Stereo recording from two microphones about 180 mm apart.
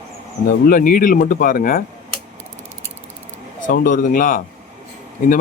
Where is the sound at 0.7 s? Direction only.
50° left (ahead or behind).